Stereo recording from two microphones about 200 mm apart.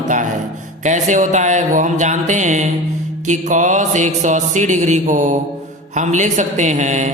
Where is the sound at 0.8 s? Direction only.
35° right (ahead or behind).